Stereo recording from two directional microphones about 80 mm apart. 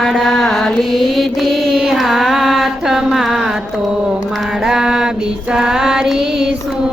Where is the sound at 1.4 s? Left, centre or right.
Centre.